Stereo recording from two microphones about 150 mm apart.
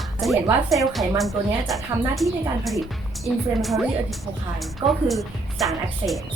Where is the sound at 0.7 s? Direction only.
Centre (ahead or behind).